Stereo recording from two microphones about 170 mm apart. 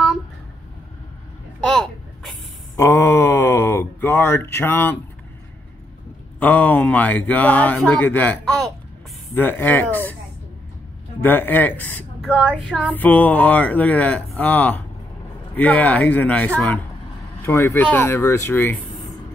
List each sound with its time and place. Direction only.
1.6 s a sound: 5° left (ahead or behind)
2.7 s a sound: 15° left (ahead or behind)
6.4 s speech: 10° left (ahead or behind)
11.2 s speech: 10° left (ahead or behind)
12.3 s child singing: 5° right (ahead or behind)
12.8 s speech: 10° left (ahead or behind)